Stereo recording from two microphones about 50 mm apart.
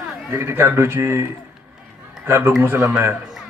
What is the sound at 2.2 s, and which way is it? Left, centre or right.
Speech, right.